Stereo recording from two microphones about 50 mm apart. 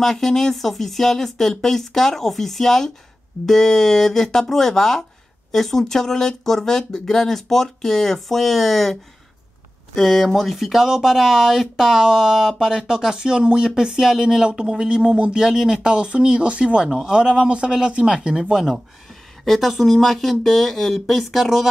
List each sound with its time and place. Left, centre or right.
0.0 s speech: centre
9.9 s speech: centre
18.5 s speech: centre